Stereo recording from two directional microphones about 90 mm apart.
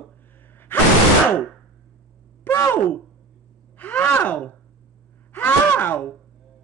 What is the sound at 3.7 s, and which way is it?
Speech, 20° left (ahead or behind).